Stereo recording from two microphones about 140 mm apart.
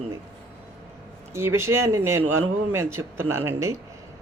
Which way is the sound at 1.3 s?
20° right (ahead or behind).